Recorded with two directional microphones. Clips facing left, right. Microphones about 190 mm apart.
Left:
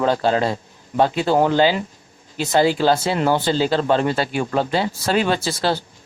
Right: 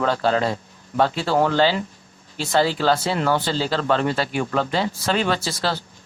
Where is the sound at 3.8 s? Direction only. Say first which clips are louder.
Left 2 dB; 30° left (ahead or behind).